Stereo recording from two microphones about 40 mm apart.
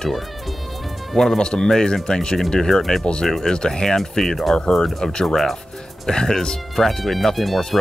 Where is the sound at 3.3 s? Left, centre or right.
Centre.